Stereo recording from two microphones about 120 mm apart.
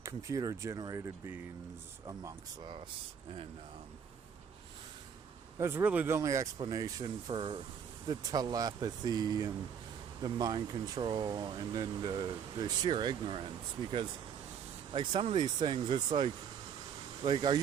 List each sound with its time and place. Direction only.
0.0 s speech: 25° right (ahead or behind)
5.5 s speech: 20° right (ahead or behind); by 7.6 s 45° right (ahead or behind)
8.0 s speech: 35° right (ahead or behind)
14.9 s speech: 40° right (ahead or behind)